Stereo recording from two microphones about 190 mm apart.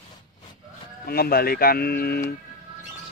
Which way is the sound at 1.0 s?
55° left (ahead or behind).